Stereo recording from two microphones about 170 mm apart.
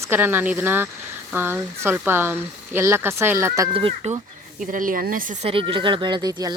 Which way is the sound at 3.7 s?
35° right (ahead or behind).